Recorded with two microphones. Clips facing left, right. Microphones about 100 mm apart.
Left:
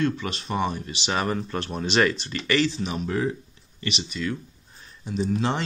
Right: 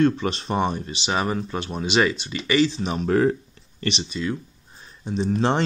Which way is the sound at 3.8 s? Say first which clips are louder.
Right 3 dB; 30° right (ahead or behind).